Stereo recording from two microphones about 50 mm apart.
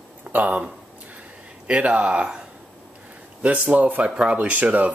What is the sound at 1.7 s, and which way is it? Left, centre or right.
Speech, right.